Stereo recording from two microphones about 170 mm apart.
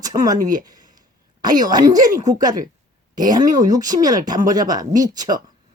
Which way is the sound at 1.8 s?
20° right (ahead or behind).